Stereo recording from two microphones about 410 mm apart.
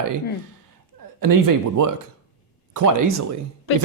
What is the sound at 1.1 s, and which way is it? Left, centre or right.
Speech, right.